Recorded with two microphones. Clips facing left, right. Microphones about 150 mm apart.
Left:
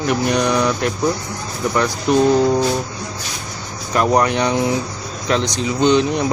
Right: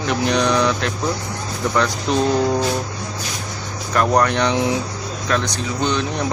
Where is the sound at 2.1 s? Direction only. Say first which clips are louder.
Left 6 dB; 5° left (ahead or behind).